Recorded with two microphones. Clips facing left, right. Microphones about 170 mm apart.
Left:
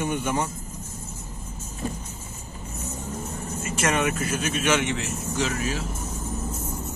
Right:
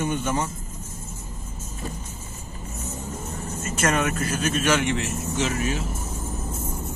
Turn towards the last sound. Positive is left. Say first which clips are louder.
# right 1 dB
turn(degrees=0)  # may be behind; listen again after turning